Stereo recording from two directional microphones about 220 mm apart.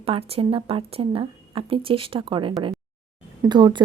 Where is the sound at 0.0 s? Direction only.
25° right (ahead or behind).